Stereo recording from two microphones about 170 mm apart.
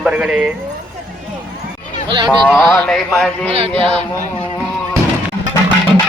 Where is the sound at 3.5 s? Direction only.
35° right (ahead or behind).